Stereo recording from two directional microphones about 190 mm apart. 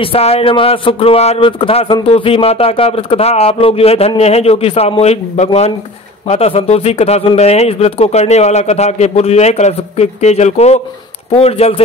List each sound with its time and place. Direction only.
0.0 s speech: 30° left (ahead or behind)